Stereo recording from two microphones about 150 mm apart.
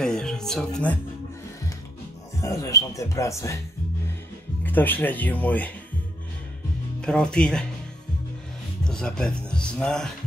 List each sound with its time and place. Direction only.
0.0 s music: 5° left (ahead or behind)
2.4 s speech: 20° left (ahead or behind)
4.6 s speech: 10° left (ahead or behind)
7.0 s speech: 5° left (ahead or behind)
8.8 s speech: 5° left (ahead or behind)